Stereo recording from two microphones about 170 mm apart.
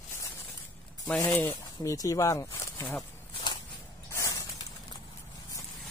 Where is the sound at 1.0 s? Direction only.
5° left (ahead or behind).